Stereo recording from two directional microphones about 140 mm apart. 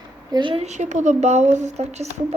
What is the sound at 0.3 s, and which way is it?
Speech, 35° right (ahead or behind).